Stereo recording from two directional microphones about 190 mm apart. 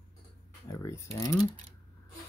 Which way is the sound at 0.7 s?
15° left (ahead or behind).